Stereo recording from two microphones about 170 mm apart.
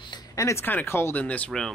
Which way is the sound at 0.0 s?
20° left (ahead or behind).